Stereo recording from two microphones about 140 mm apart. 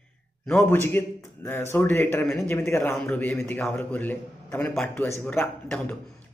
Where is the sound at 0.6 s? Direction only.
15° left (ahead or behind).